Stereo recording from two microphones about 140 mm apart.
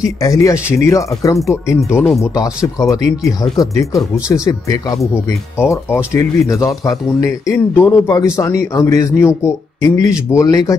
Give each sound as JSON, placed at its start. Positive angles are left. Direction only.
{"t": 0.0, "sound": "a man's voice", "side_deg": 25}